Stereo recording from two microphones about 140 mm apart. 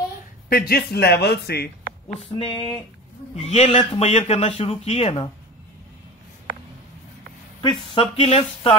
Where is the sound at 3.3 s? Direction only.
50° left (ahead or behind).